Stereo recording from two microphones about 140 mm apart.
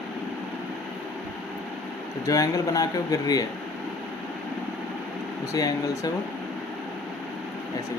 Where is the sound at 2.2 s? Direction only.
25° left (ahead or behind).